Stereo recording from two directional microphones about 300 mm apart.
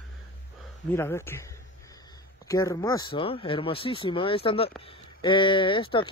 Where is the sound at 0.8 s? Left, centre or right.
Centre.